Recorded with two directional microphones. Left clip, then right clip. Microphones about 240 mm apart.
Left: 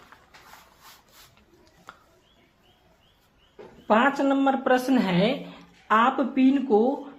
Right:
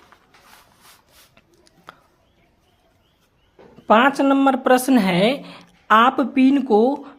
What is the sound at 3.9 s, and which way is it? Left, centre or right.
Speech, right.